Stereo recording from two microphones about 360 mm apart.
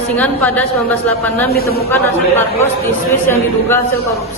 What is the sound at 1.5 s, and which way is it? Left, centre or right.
Speech, left.